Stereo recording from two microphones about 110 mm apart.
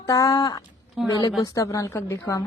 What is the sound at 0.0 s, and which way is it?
Speech, 30° left (ahead or behind).